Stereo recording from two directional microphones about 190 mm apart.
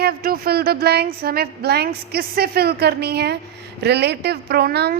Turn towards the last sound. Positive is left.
turn(degrees=-55)  # may be behind; listen again after turning